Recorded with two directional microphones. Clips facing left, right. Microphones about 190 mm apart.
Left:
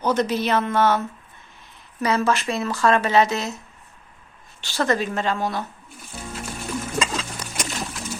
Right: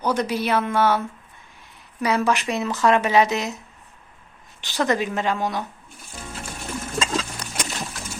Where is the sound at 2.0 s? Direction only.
15° right (ahead or behind).